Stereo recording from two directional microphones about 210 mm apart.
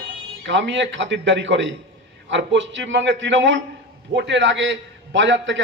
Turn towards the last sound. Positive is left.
turn(degrees=-60)  # may be behind; listen again after turning